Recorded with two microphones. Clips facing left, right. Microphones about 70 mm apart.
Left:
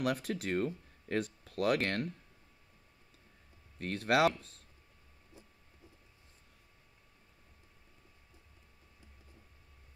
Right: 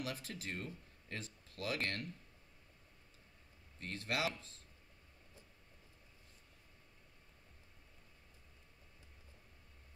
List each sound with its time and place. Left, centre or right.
0.0 s speech: left
3.8 s speech: left